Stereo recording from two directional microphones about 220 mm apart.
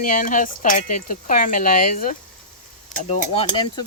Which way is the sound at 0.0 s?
40° left (ahead or behind).